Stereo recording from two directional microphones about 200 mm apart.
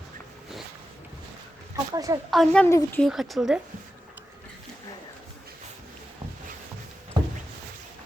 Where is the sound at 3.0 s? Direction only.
Centre (ahead or behind).